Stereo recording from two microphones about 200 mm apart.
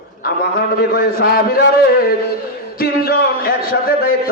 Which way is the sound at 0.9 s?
45° left (ahead or behind).